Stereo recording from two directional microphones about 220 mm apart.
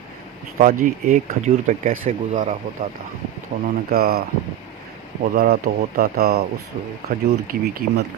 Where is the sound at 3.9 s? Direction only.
45° right (ahead or behind).